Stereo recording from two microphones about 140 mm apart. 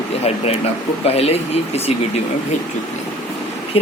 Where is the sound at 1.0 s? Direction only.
45° left (ahead or behind).